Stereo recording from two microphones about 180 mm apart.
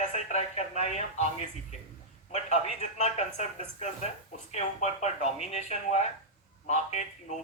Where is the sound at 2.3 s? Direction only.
40° left (ahead or behind).